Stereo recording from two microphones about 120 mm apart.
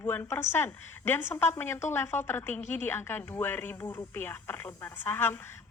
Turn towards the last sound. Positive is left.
turn(degrees=15)  # may be behind; listen again after turning